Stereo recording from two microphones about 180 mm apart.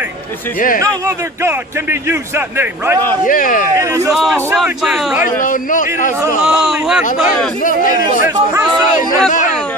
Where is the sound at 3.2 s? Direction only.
50° left (ahead or behind).